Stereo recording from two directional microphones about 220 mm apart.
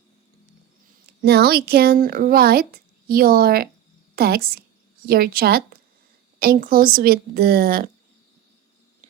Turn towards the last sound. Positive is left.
turn(degrees=-40)  # may be behind; listen again after turning